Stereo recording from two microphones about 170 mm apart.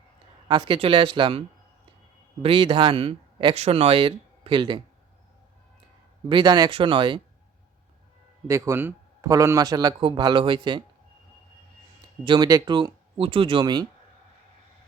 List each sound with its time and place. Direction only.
0.4 s speech: 25° right (ahead or behind)
6.2 s speech: 25° right (ahead or behind)
8.4 s speech: 15° right (ahead or behind)
12.2 s speech: 25° right (ahead or behind)